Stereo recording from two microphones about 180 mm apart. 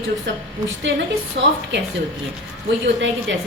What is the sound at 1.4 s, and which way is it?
Speech, 75° right (ahead or behind).